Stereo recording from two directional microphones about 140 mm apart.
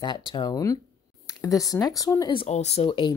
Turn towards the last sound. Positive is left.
turn(degrees=35)  # may be behind; listen again after turning